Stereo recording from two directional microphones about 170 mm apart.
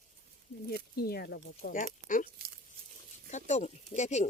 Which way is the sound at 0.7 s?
65° left (ahead or behind).